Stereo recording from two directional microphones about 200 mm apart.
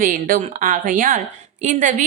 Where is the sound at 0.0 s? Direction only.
45° right (ahead or behind).